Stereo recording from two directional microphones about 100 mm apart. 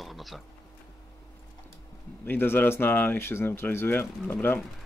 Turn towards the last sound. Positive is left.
turn(degrees=20)  # may be behind; listen again after turning